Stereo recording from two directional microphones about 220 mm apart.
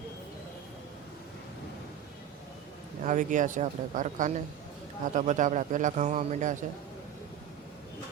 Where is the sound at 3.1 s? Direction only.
35° right (ahead or behind).